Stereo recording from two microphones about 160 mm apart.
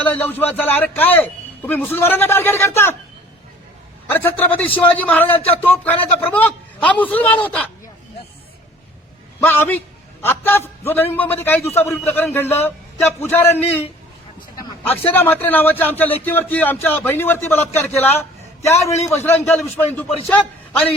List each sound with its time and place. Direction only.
0.0 s a man's voice: 15° left (ahead or behind)
4.1 s a man's voice: 10° left (ahead or behind)
9.4 s a man's voice: 15° left (ahead or behind)
15.1 s a man's voice: 15° left (ahead or behind)
18.1 s a sound: 15° left (ahead or behind)
19.0 s a man's voice: 15° left (ahead or behind)